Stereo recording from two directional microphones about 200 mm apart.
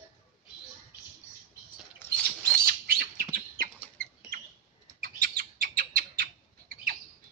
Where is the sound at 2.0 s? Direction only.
5° left (ahead or behind).